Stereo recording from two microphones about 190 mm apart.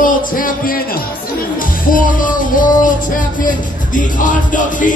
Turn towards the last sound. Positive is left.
turn(degrees=45)  # may be behind; listen again after turning